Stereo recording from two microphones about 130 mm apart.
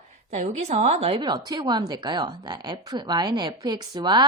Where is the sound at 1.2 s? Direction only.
35° right (ahead or behind).